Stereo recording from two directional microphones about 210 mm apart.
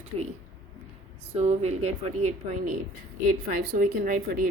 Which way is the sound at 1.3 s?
30° right (ahead or behind).